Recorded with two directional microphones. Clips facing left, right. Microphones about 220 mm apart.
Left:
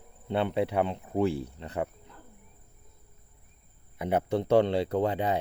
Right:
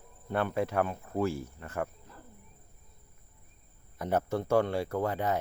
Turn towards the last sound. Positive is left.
turn(degrees=15)  # may be behind; listen again after turning